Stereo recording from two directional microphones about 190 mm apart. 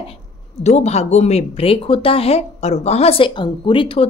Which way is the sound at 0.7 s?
35° left (ahead or behind).